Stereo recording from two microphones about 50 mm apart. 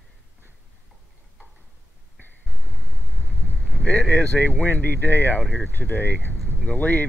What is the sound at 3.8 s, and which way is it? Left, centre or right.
Speech, centre.